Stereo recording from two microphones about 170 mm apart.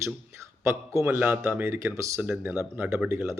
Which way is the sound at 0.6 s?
15° right (ahead or behind).